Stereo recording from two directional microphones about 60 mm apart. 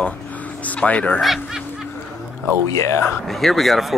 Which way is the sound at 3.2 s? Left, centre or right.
Centre.